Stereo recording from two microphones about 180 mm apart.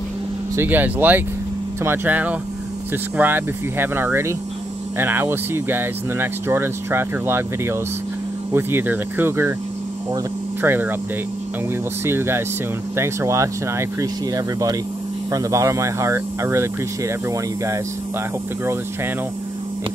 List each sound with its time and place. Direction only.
0.6 s speech: 10° right (ahead or behind)
10.6 s speech: 10° right (ahead or behind)
12.0 s speech: 15° right (ahead or behind)